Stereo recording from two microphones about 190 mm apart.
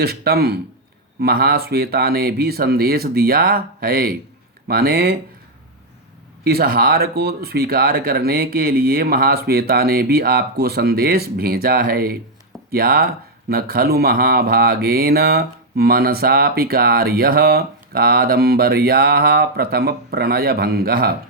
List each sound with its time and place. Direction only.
0.0 s a man's voice: 55° right (ahead or behind)
6.4 s speech: 55° right (ahead or behind)